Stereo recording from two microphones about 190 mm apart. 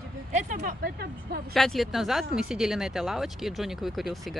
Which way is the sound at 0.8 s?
55° right (ahead or behind).